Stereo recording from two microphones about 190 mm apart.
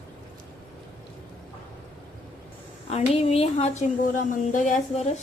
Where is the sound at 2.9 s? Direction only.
30° left (ahead or behind).